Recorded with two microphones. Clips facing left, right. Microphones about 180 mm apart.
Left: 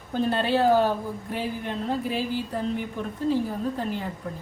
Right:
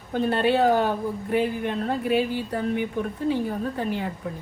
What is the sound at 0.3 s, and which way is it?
A woman's voice, 60° right (ahead or behind).